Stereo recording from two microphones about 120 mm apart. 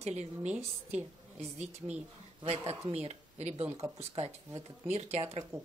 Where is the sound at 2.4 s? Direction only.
55° right (ahead or behind).